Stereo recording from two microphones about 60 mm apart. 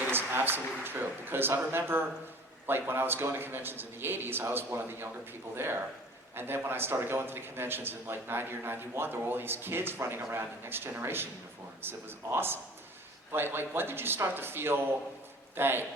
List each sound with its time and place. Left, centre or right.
0.1 s a man's voice: right